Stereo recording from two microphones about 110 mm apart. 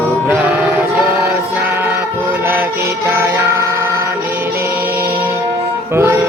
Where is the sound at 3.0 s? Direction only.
25° right (ahead or behind).